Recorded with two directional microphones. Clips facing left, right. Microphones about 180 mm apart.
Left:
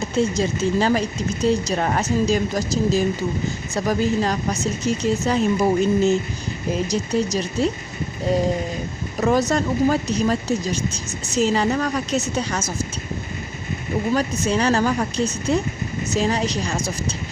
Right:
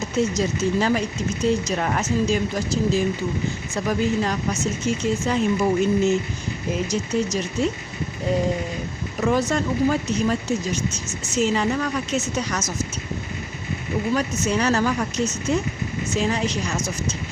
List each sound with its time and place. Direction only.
0.0 s speech: 30° left (ahead or behind)
9.2 s speech: 40° left (ahead or behind)
14.1 s speech: 35° left (ahead or behind)